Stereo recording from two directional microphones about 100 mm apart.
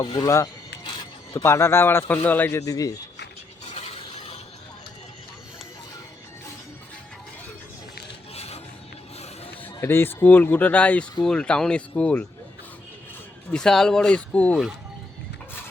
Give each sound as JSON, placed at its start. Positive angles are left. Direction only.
{"t": 0.0, "sound": "speech", "side_deg": 50}
{"t": 1.3, "sound": "a man's voice", "side_deg": 30}
{"t": 2.5, "sound": "a man's voice", "side_deg": 30}
{"t": 3.8, "sound": "a sound", "side_deg": 80}
{"t": 8.3, "sound": "filing", "side_deg": 90}
{"t": 9.6, "sound": "speech", "side_deg": 25}
{"t": 13.5, "sound": "speech", "side_deg": 5}